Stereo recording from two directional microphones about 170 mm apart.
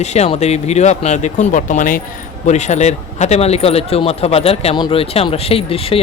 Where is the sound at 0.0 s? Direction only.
40° left (ahead or behind).